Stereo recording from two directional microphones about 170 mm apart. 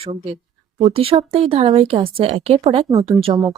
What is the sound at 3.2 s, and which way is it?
Speech, 25° right (ahead or behind).